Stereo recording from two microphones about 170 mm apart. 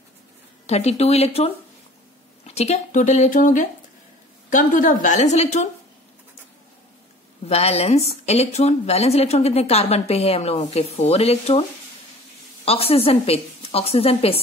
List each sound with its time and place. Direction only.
0.7 s a woman's voice: 40° left (ahead or behind)
7.4 s a woman's voice: 40° left (ahead or behind)
12.6 s a woman's voice: 35° left (ahead or behind)